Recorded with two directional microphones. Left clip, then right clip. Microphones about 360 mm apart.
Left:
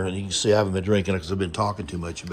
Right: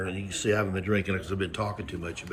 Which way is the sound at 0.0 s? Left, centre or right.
Left.